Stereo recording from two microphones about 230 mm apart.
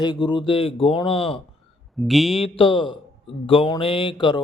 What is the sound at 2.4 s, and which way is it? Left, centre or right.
Speech, left.